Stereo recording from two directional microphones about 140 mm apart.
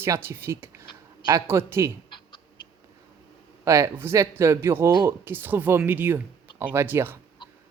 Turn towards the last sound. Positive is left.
turn(degrees=-15)  # may be behind; listen again after turning